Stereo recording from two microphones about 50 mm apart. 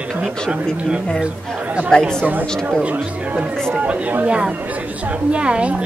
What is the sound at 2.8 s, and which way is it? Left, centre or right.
Speech, right.